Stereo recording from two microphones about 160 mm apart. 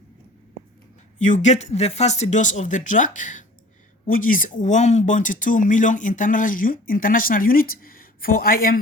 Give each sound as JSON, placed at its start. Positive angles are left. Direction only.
{"t": 1.2, "sound": "speech", "side_deg": 50}